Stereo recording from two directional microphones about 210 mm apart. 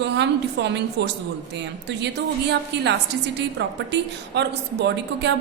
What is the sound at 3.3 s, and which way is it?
A woman's voice, 55° right (ahead or behind).